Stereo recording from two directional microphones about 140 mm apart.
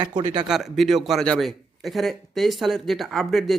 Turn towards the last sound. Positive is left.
turn(degrees=0)  # may be behind; listen again after turning